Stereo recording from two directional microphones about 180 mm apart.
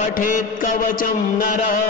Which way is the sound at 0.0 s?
50° left (ahead or behind).